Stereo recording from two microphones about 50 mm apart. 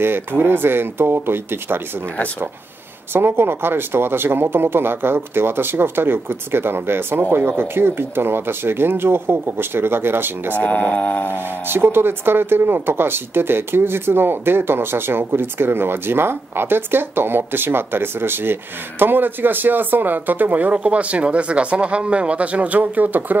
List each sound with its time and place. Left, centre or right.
0.0 s speech: right
3.1 s speech: right
10.6 s speech: left
11.7 s speech: right